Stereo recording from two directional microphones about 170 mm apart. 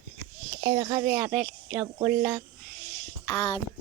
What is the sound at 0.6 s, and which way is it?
Speech, 30° right (ahead or behind).